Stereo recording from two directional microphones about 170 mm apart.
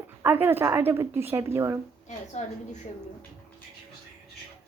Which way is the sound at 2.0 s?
45° left (ahead or behind).